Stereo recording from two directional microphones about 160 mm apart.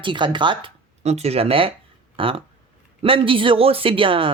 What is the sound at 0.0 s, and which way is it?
Speech, 30° right (ahead or behind).